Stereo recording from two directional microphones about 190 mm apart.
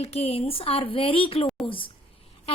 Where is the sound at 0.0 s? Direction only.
30° left (ahead or behind).